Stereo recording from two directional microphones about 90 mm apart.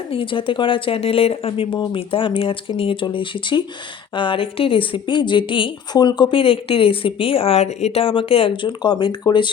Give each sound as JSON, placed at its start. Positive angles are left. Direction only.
{"t": 0.1, "sound": "speech", "side_deg": 75}
{"t": 1.8, "sound": "speech", "side_deg": 80}
{"t": 5.9, "sound": "speech", "side_deg": 55}